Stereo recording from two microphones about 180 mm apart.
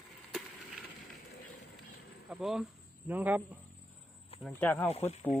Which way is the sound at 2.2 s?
5° right (ahead or behind).